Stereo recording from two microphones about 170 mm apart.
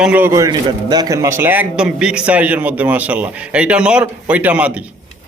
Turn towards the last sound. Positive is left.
turn(degrees=-10)  # may be behind; listen again after turning